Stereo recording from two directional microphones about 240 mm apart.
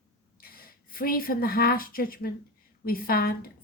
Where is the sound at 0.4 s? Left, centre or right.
Left.